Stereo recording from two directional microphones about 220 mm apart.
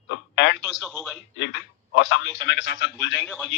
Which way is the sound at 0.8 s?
Centre (ahead or behind).